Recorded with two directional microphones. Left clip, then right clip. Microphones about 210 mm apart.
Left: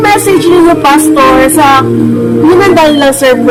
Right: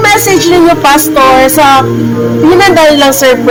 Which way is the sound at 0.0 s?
30° right (ahead or behind).